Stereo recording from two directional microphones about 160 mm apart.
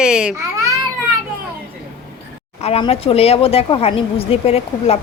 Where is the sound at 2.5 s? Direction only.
40° left (ahead or behind).